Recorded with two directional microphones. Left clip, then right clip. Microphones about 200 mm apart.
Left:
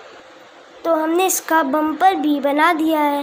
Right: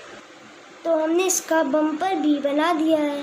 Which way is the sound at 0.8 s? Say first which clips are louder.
Left 4 dB; 25° left (ahead or behind).